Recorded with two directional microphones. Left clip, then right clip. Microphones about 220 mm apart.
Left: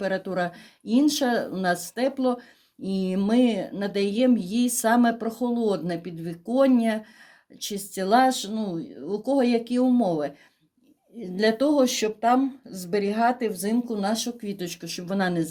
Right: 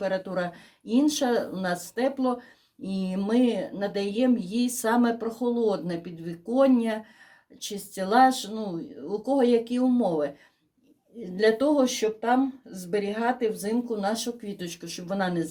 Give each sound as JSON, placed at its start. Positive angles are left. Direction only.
{"t": 0.0, "sound": "speech", "side_deg": 35}